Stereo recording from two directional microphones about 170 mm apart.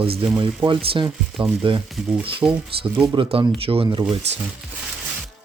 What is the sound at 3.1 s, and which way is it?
Speech, 30° right (ahead or behind).